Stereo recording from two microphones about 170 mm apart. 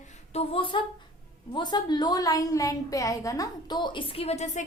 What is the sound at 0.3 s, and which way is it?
A woman's voice, 30° left (ahead or behind).